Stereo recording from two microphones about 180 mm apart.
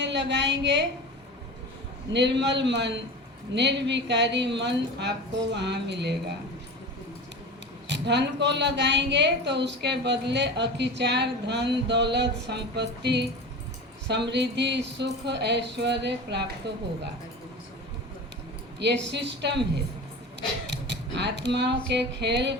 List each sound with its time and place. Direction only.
0.0 s a woman's voice: 80° right
2.1 s a woman's voice: 75° right (ahead or behind)
7.9 s a woman's voice: 75° right (ahead or behind)
18.8 s a woman's voice: 75° right (ahead or behind)
20.7 s a sound: 75° right (ahead or behind)